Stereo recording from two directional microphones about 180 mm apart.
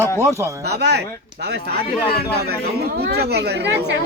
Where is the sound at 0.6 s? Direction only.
65° right (ahead or behind).